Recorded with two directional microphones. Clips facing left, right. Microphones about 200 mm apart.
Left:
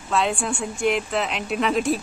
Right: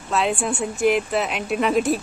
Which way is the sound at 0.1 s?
5° right (ahead or behind).